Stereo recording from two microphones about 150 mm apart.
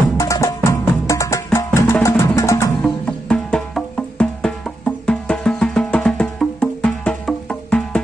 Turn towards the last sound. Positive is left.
turn(degrees=5)  # may be behind; listen again after turning